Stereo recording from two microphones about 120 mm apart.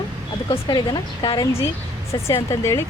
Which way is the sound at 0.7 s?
35° left (ahead or behind).